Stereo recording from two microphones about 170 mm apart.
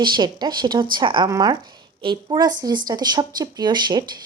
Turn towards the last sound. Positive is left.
turn(degrees=-25)  # may be behind; listen again after turning